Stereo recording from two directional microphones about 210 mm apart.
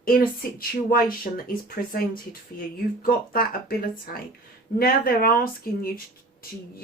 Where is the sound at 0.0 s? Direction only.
45° left (ahead or behind).